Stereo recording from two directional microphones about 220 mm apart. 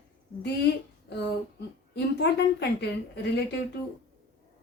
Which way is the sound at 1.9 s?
50° left (ahead or behind).